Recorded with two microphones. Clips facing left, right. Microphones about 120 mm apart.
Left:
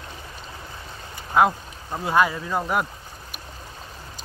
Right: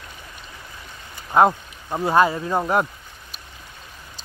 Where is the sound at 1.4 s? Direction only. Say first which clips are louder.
Right 3 dB; 30° right (ahead or behind).